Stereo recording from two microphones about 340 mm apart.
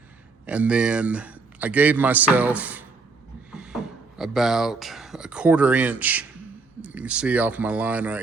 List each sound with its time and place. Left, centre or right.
0.4 s a man's voice: centre
3.5 s a sound: centre
4.2 s a man's voice: centre